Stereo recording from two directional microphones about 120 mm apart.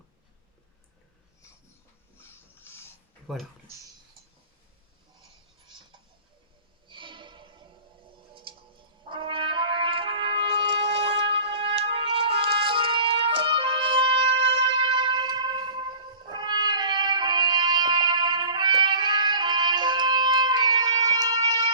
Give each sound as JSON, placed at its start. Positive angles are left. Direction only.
{"t": 3.3, "sound": "speech", "side_deg": 0}
{"t": 6.8, "sound": "music", "side_deg": -45}
{"t": 9.0, "sound": "brass instrument", "side_deg": -45}